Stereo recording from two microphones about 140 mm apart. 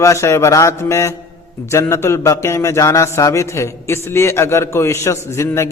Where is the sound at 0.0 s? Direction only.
20° left (ahead or behind).